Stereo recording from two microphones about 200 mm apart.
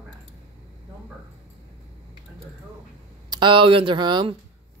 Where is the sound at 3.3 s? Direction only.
25° right (ahead or behind).